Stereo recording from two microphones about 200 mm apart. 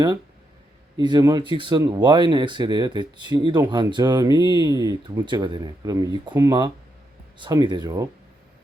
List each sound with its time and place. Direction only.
0.9 s speech: 20° right (ahead or behind)